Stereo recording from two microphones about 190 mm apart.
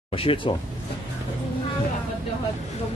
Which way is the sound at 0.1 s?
30° left (ahead or behind).